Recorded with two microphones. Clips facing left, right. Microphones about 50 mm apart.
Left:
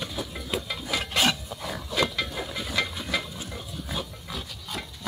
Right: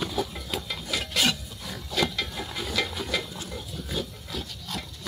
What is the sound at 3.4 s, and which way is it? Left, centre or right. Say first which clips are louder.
Pig: even; centre.